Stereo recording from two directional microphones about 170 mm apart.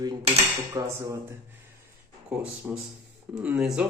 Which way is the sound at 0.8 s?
20° right (ahead or behind).